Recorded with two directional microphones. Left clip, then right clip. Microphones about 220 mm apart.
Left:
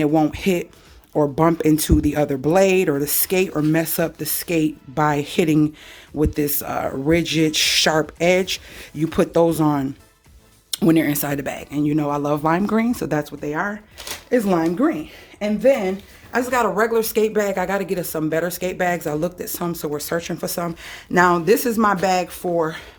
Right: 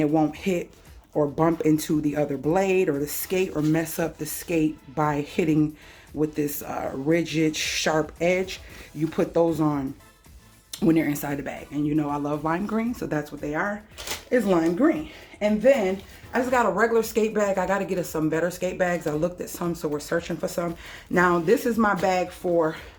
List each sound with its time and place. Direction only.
0.0 s a woman's voice: 35° left (ahead or behind)